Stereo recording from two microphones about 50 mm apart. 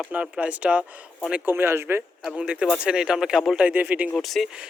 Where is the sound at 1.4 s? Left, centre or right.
Right.